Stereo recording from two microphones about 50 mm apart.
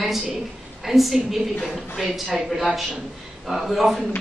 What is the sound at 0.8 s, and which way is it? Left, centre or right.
A woman's voice, centre.